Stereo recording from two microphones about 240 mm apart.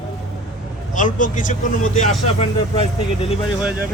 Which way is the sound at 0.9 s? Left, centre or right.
Left.